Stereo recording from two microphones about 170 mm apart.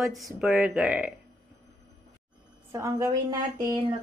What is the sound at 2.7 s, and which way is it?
A woman's voice, 15° right (ahead or behind).